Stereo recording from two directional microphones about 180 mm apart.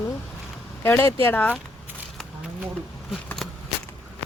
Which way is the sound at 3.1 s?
5° left (ahead or behind).